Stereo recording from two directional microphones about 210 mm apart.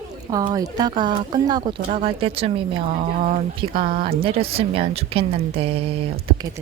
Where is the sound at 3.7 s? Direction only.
45° right (ahead or behind).